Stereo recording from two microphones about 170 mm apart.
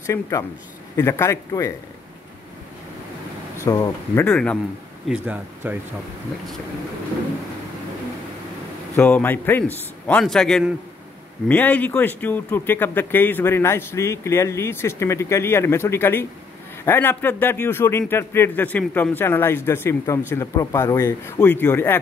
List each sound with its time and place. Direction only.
0.0 s a man's voice: 15° left (ahead or behind)
3.6 s a man's voice: 20° left (ahead or behind)
5.0 s speech: 10° right (ahead or behind)
8.9 s a man's voice: 10° left (ahead or behind)